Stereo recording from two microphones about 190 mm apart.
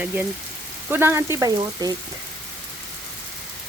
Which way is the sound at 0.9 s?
15° right (ahead or behind).